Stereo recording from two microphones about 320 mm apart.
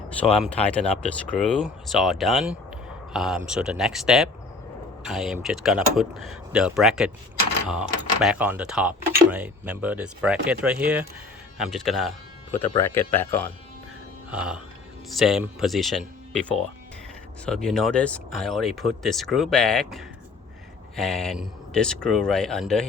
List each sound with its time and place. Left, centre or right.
0.4 s speech: centre